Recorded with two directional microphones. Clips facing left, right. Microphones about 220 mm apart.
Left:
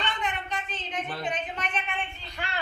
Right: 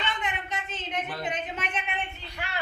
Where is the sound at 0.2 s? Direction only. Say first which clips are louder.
Left 1 dB; 20° right (ahead or behind).